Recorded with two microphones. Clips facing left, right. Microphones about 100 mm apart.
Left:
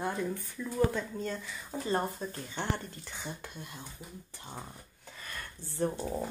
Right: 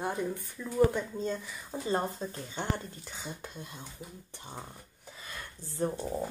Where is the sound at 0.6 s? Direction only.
15° right (ahead or behind).